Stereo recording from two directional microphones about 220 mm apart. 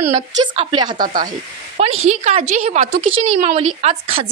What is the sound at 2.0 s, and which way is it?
A woman's voice, 30° right (ahead or behind).